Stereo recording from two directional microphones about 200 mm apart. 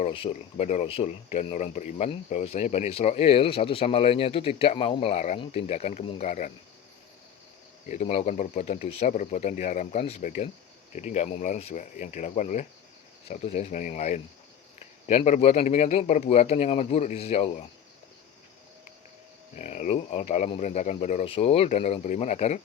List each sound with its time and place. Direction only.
0.0 s speech: 30° left (ahead or behind)
7.9 s speech: 35° left (ahead or behind)
19.5 s speech: 35° left (ahead or behind)